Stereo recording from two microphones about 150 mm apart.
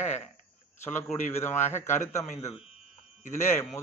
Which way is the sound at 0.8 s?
15° left (ahead or behind).